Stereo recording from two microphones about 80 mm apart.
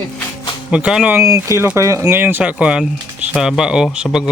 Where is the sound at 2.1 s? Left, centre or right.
Right.